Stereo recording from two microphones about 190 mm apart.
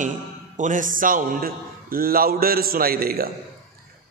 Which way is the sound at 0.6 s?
40° right (ahead or behind).